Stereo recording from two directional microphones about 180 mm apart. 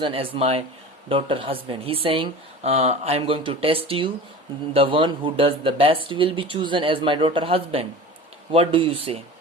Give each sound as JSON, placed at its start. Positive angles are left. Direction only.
{"t": 0.0, "sound": "speech", "side_deg": -30}